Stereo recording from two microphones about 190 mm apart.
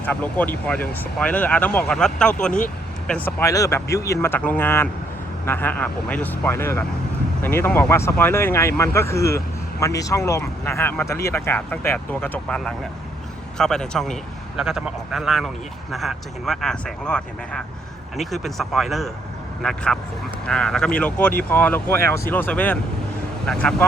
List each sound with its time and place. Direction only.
0.0 s a man's voice: 10° left (ahead or behind)